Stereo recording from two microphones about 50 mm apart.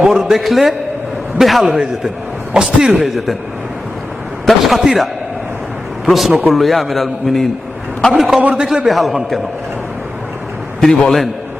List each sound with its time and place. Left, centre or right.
0.0 s a man's voice: centre
2.9 s a man's voice: centre
4.4 s a man's voice: centre
6.1 s a man's voice: centre
8.3 s a man's voice: right
8.9 s a man's voice: centre
10.8 s a man's voice: centre